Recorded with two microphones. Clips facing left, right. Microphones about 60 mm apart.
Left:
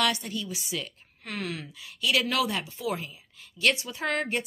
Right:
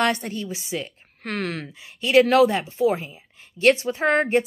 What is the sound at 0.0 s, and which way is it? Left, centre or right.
Speech, right.